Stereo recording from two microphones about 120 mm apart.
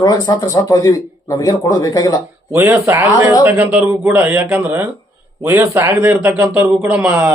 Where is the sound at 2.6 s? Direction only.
20° right (ahead or behind).